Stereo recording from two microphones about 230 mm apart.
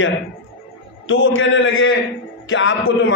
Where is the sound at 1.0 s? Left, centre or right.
Left.